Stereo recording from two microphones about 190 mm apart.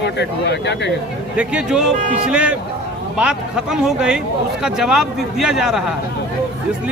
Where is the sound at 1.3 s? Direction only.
5° right (ahead or behind).